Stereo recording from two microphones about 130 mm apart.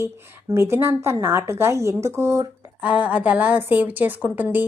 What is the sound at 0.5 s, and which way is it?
Speech, 20° right (ahead or behind).